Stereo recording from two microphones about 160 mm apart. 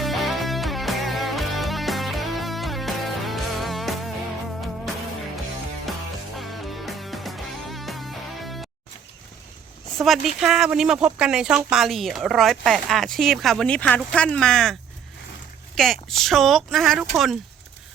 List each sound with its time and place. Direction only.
0.0 s music: centre (ahead or behind)
5.9 s music: centre (ahead or behind)
10.0 s speech: centre (ahead or behind)